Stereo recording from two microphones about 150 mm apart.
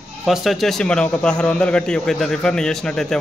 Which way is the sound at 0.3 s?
Centre (ahead or behind).